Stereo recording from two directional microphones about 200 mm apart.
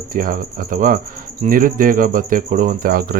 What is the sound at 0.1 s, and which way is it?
Speech, 45° right (ahead or behind).